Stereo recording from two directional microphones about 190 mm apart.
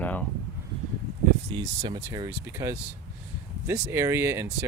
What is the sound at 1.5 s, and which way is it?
Speech, 25° right (ahead or behind).